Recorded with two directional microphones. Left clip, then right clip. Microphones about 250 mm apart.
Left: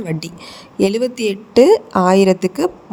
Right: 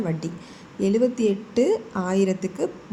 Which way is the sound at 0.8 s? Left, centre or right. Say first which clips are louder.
Left 5 dB; left.